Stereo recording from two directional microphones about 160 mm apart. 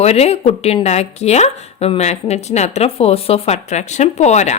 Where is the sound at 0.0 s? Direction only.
40° left (ahead or behind).